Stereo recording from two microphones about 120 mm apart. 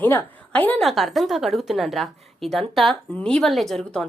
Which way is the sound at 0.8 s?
Centre (ahead or behind).